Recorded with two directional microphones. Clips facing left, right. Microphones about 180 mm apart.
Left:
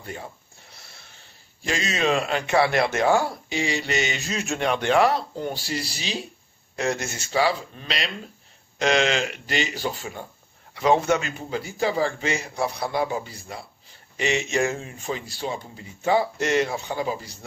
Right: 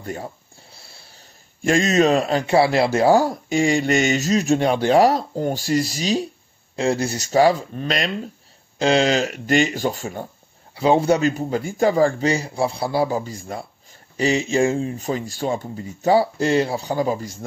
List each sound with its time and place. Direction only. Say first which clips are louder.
0.0 s speech: right 6 dB; 40° right (ahead or behind)
0.7 s wheeze: right 2 dB; 30° right (ahead or behind)
1.6 s a man's voice: right 9 dB; 45° right (ahead or behind)
6.8 s speech: right 6 dB; 30° right (ahead or behind); by 8.1 s 45° right (ahead or behind)
8.7 s speech: right 4 dB; 30° right (ahead or behind)
10.7 s a man's voice: right 3 dB; 30° right (ahead or behind); by 13.7 s 45° right (ahead or behind)
14.1 s a man's voice: right 5 dB; 35° right (ahead or behind)